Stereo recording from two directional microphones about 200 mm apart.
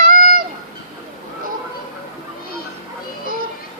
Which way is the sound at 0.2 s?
45° right (ahead or behind).